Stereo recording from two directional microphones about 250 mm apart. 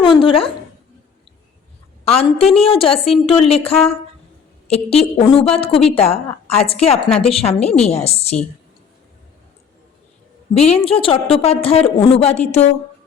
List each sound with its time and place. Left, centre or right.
0.0 s a sound: left
2.0 s a woman's voice: left
10.5 s a woman's voice: left